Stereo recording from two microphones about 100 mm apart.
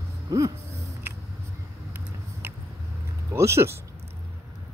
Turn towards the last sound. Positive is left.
turn(degrees=-25)  # may be behind; listen again after turning